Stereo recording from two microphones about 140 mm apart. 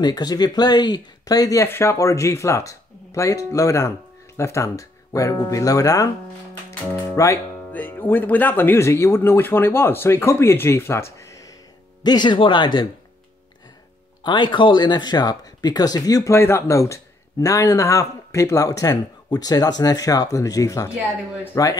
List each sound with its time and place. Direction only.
0.0 s speech: 30° left (ahead or behind)
7.2 s speech: 15° left (ahead or behind)
12.0 s speech: 30° left (ahead or behind)
14.2 s speech: 35° left (ahead or behind)